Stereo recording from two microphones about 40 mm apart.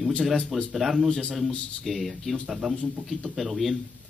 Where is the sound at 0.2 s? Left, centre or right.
Centre.